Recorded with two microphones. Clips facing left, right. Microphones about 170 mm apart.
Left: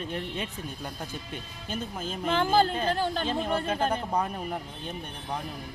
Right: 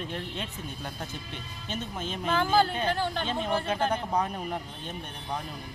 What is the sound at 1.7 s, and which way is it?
Speech, 5° left (ahead or behind).